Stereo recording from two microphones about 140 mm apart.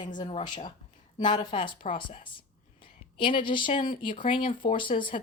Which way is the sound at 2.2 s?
35° left (ahead or behind).